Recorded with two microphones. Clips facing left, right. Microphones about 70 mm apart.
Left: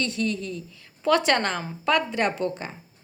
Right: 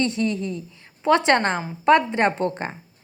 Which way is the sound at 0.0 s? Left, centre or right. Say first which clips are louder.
Right 4 dB; right.